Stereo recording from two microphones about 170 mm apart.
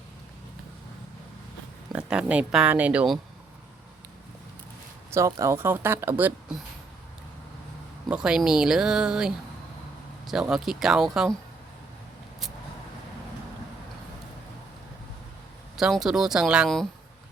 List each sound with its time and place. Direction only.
1.9 s speech: 5° right (ahead or behind)
5.1 s speech: 15° right (ahead or behind)
8.1 s speech: 5° right (ahead or behind)
15.8 s speech: centre (ahead or behind)